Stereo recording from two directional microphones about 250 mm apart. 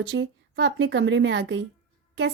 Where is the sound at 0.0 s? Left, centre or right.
Right.